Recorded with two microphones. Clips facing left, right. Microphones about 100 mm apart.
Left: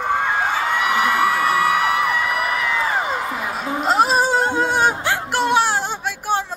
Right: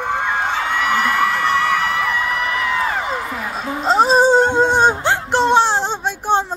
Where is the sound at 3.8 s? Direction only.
30° right (ahead or behind).